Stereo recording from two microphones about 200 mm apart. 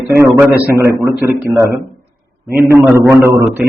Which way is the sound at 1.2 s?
10° right (ahead or behind).